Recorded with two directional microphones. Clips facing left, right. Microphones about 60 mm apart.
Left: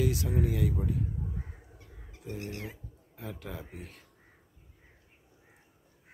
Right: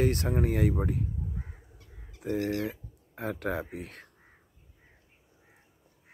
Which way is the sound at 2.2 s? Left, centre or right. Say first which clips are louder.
Right 10 dB; right.